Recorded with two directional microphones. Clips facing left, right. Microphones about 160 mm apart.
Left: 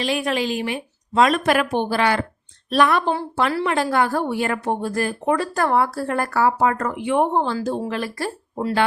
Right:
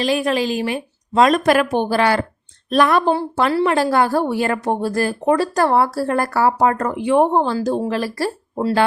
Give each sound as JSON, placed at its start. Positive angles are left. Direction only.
{"t": 0.0, "sound": "a woman's voice", "side_deg": -40}